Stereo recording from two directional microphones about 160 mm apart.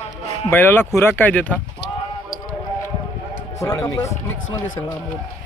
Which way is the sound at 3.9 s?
20° left (ahead or behind).